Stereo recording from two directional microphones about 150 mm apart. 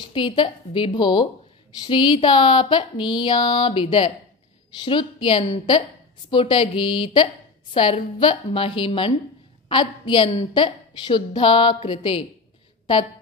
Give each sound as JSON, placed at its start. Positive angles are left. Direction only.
{"t": 0.1, "sound": "a woman's voice", "side_deg": 35}